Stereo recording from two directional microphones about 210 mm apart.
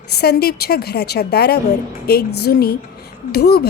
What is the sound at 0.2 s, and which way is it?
A child's voice, 50° left (ahead or behind).